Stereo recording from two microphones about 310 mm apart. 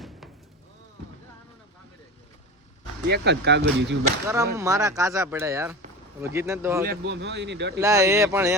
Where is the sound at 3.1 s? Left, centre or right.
Right.